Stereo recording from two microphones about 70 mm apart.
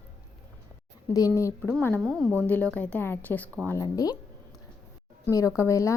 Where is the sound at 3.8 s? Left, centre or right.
Left.